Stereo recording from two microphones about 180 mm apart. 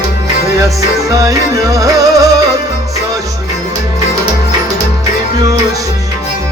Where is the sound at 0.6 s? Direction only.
20° right (ahead or behind).